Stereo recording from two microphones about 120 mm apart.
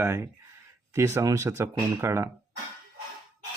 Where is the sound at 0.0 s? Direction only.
20° right (ahead or behind).